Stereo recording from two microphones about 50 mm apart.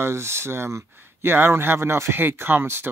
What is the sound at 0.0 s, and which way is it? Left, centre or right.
Speech, right.